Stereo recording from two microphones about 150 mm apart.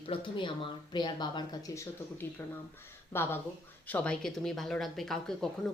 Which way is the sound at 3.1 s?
15° left (ahead or behind).